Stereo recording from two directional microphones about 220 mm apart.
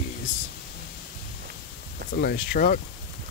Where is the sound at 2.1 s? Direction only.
45° left (ahead or behind).